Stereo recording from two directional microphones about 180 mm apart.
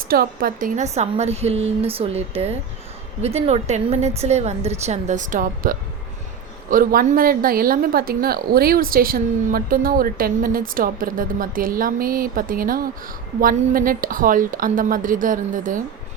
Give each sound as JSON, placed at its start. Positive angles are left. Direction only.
{"t": 0.1, "sound": "a woman's voice", "side_deg": -55}